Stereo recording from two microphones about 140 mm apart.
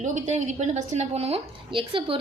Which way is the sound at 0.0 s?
60° right (ahead or behind).